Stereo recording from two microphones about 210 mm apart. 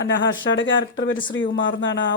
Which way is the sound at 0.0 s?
60° left (ahead or behind).